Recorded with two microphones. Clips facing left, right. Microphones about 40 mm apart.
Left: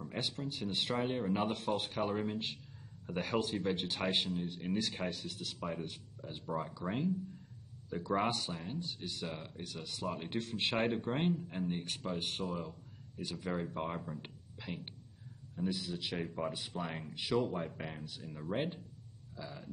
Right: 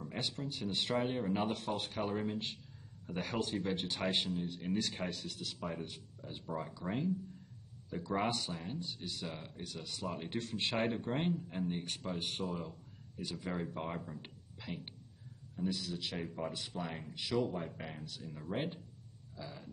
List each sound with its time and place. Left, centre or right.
0.0 s speech: centre
6.2 s speech: centre
11.8 s speech: centre
12.4 s speech: centre
13.2 s speech: centre
19.3 s a sound: centre